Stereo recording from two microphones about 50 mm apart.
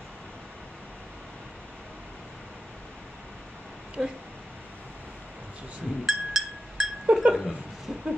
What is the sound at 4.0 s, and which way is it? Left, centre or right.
Speech, centre.